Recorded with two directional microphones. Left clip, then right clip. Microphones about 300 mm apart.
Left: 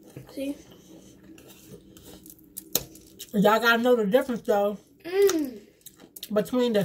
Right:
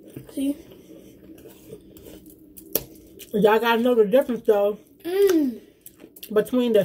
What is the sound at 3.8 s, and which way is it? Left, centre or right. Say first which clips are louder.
Speech: right 3 dB; centre.